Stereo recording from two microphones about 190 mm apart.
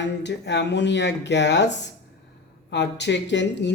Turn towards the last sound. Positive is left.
turn(degrees=70)  # may be behind; listen again after turning